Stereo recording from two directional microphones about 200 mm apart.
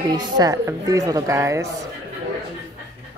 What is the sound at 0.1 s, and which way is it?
Speech, 20° right (ahead or behind).